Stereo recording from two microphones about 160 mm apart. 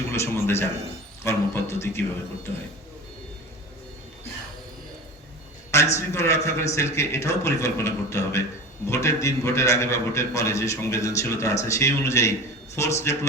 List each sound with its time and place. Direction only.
0.1 s a man's voice: 15° left (ahead or behind)
5.7 s a man's voice: 15° left (ahead or behind)